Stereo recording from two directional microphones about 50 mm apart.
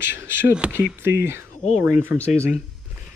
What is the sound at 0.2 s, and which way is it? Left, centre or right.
Speech, right.